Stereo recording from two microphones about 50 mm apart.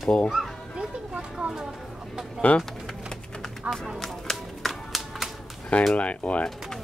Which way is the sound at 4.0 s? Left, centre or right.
Centre.